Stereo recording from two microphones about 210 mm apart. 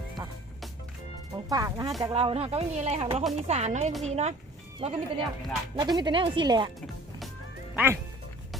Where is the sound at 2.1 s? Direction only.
25° right (ahead or behind).